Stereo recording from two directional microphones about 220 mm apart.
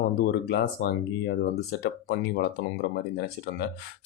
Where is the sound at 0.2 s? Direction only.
45° left (ahead or behind).